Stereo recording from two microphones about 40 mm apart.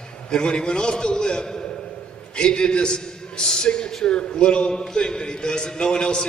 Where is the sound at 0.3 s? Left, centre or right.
Left.